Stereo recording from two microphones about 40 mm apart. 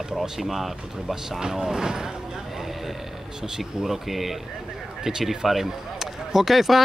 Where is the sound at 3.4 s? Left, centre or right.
Centre.